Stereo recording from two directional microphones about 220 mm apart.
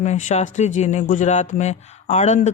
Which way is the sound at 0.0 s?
35° left (ahead or behind).